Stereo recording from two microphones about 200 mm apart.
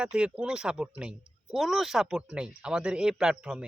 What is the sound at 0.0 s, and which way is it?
Speech, 5° right (ahead or behind).